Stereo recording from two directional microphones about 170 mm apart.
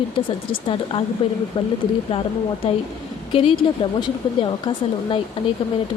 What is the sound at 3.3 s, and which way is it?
Speech, 35° left (ahead or behind).